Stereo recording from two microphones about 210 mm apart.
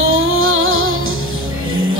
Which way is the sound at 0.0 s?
75° right (ahead or behind).